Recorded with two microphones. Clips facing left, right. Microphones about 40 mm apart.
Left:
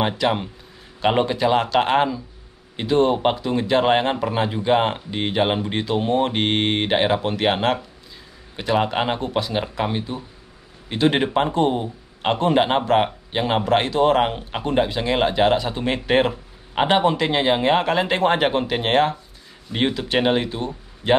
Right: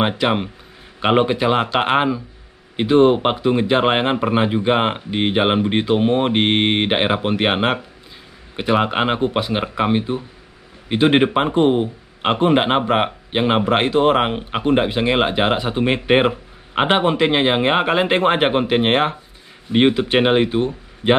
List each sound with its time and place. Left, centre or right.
0.0 s speech: right